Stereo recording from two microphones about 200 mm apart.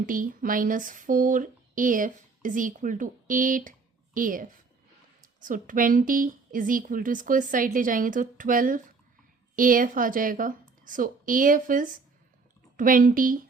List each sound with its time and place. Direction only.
0.0 s speech: 45° right (ahead or behind)